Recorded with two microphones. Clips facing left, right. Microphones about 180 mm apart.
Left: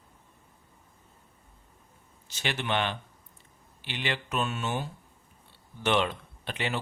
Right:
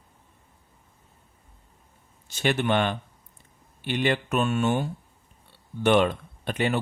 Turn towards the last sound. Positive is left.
turn(degrees=-50)  # may be behind; listen again after turning